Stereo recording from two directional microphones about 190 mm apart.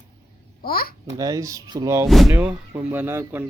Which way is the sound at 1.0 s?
20° right (ahead or behind).